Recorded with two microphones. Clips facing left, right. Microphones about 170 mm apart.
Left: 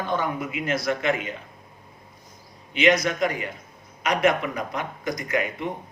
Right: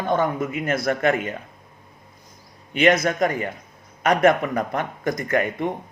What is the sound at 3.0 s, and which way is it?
A man's voice, 50° right (ahead or behind).